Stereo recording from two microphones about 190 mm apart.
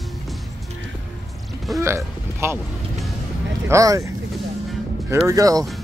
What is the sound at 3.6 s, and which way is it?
Speech, 15° right (ahead or behind).